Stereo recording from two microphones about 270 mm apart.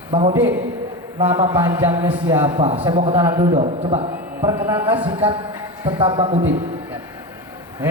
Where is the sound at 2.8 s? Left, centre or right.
Right.